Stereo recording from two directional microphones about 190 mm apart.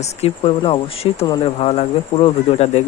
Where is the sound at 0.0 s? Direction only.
35° left (ahead or behind).